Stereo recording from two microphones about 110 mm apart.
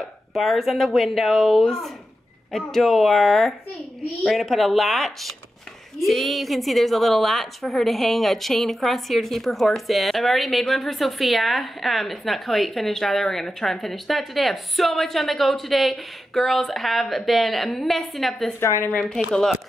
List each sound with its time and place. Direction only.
0.3 s a woman's voice: centre (ahead or behind)
18.6 s a woman's voice: 25° left (ahead or behind)
19.3 s a woman's voice: 5° left (ahead or behind)